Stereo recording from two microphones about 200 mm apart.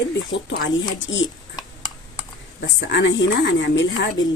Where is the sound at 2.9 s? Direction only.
65° left (ahead or behind).